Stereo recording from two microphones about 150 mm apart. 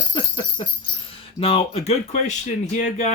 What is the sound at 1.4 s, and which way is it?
Speech, 40° left (ahead or behind).